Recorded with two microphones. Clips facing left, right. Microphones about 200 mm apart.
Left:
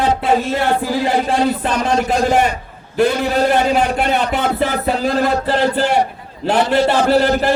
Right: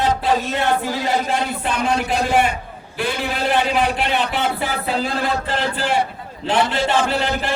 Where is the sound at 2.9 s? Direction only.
45° left (ahead or behind).